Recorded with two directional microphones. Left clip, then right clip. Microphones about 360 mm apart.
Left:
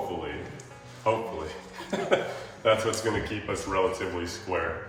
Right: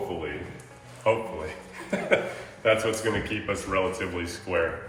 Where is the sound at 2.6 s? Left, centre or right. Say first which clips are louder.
Right 1 dB; centre.